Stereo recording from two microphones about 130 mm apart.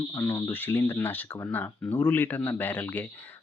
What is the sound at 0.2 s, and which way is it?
Speech, 20° left (ahead or behind).